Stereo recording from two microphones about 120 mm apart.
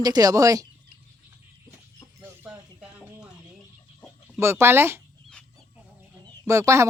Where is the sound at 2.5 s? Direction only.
5° right (ahead or behind).